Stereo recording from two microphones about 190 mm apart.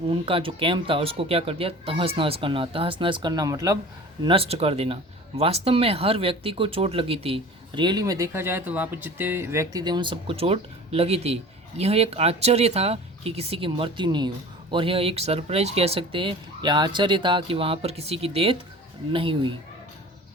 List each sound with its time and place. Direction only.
0.1 s speech: 30° right (ahead or behind)
4.2 s speech: 30° right (ahead or behind)